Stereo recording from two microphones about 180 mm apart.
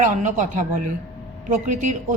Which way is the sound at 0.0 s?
45° right (ahead or behind).